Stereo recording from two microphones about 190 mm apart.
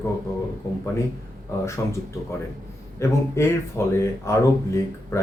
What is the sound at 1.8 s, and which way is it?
Speech, 15° left (ahead or behind).